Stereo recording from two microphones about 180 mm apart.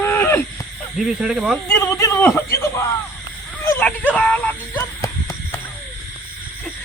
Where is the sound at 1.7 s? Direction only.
15° left (ahead or behind).